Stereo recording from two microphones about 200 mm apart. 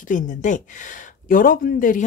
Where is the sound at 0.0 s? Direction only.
40° left (ahead or behind).